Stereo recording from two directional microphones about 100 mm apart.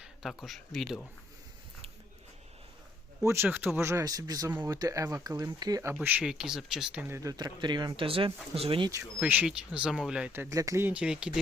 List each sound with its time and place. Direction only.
0.0 s speech: 5° right (ahead or behind)
3.2 s speech: 25° right (ahead or behind)
4.0 s speech: 40° right (ahead or behind)
5.9 s speech: 15° right (ahead or behind)
6.2 s speech: 5° right (ahead or behind)
7.1 s speech: 35° right (ahead or behind)
8.0 s speech: 65° right (ahead or behind)
8.5 s speech: 75° right (ahead or behind)
9.2 s speech: 15° right (ahead or behind)
10.5 s speech: 35° right (ahead or behind)
10.8 s speech: 10° right (ahead or behind)